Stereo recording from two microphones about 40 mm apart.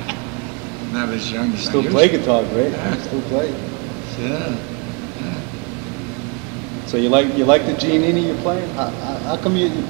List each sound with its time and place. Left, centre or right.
0.9 s a man's voice: centre
6.9 s a man's voice: centre